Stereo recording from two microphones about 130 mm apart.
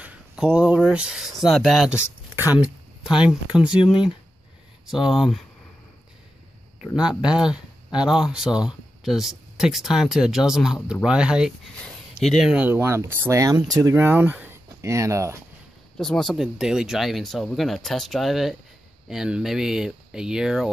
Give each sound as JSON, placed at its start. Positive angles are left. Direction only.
{"t": 0.0, "sound": "speech", "side_deg": -10}
{"t": 2.0, "sound": "speech", "side_deg": -15}
{"t": 7.0, "sound": "speech", "side_deg": -5}
{"t": 16.0, "sound": "speech", "side_deg": 0}